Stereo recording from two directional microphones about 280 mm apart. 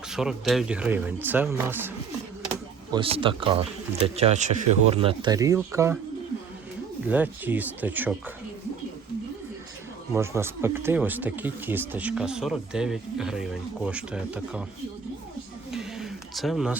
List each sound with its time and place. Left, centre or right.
0.1 s speech: centre
2.9 s speech: centre
7.1 s speech: centre
10.1 s speech: centre
15.7 s a sound: centre